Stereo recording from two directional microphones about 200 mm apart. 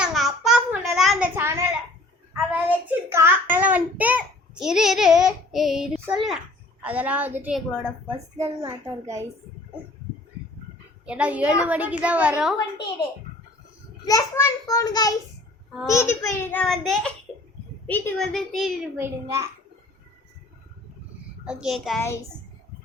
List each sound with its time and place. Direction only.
0.0 s a sound: centre (ahead or behind)
1.4 s a sound: 15° right (ahead or behind)
2.5 s child singing: 10° right (ahead or behind)
6.8 s a woman's voice: 5° right (ahead or behind)
7.7 s a woman's voice: 5° left (ahead or behind)
8.4 s a woman's voice: 20° right (ahead or behind)
11.0 s a woman's voice: 5° right (ahead or behind)
14.0 s a child's voice: 15° left (ahead or behind); by 19.0 s centre (ahead or behind)
19.0 s a woman's voice: 15° right (ahead or behind)
21.4 s a woman's voice: 5° right (ahead or behind)